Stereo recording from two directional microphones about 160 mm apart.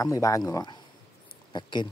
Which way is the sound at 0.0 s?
20° left (ahead or behind).